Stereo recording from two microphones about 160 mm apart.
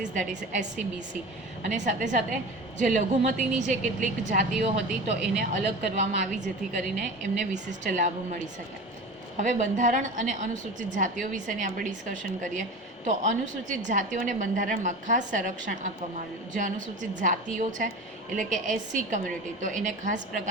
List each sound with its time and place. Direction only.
1.6 s a woman's voice: 50° right (ahead or behind)